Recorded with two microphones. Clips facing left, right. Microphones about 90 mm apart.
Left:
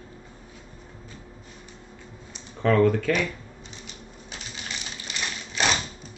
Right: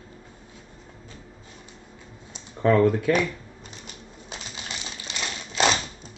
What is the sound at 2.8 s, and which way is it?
Speech, 15° right (ahead or behind).